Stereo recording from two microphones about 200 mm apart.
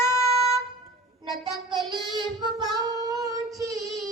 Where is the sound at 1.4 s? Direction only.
25° right (ahead or behind).